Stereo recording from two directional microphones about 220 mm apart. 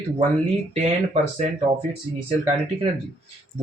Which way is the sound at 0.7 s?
35° right (ahead or behind).